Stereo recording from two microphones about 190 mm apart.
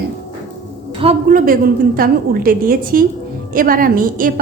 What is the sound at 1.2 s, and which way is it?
A woman's voice, 45° right (ahead or behind).